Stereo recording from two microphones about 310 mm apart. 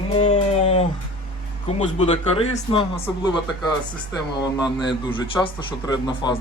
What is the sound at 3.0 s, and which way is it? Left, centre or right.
Mantra, centre.